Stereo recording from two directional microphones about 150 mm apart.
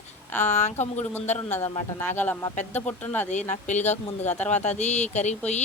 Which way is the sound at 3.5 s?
50° left (ahead or behind).